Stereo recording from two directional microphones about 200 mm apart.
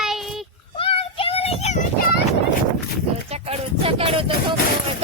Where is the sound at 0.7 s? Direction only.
25° left (ahead or behind).